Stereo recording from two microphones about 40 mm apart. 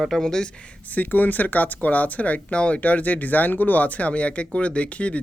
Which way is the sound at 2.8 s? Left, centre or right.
Left.